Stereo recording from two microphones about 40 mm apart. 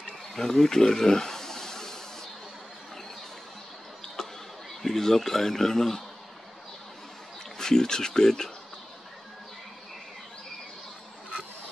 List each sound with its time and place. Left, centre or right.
0.3 s snake: centre
4.2 s a sound: centre
4.8 s speech: centre
7.5 s speech: centre